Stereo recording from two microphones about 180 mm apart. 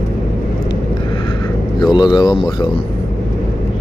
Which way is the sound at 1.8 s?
25° left (ahead or behind).